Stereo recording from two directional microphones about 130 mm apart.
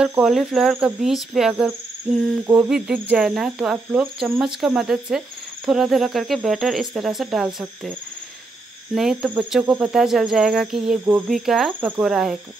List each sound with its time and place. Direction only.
0.0 s speech: 5° right (ahead or behind)
2.4 s cricket: 15° right (ahead or behind)
2.7 s speech: 5° right (ahead or behind)
8.9 s cricket: 5° right (ahead or behind)
9.5 s speech: 5° right (ahead or behind)